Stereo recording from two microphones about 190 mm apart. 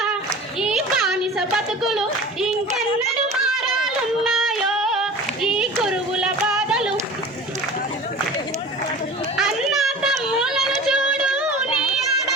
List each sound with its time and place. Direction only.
0.6 s a child's voice: centre (ahead or behind)
3.6 s a sound: centre (ahead or behind)
9.4 s children playing: centre (ahead or behind)